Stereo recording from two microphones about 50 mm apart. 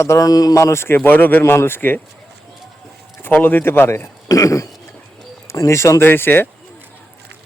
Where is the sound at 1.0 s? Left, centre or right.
Left.